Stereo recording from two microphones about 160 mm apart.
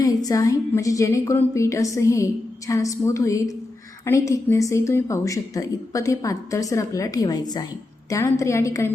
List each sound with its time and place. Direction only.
0.0 s a woman's voice: 20° left (ahead or behind)